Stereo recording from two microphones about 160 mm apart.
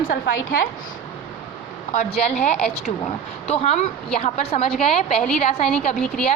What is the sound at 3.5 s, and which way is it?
A woman's voice, 45° left (ahead or behind).